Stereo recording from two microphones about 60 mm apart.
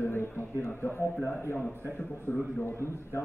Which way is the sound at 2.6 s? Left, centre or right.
Left.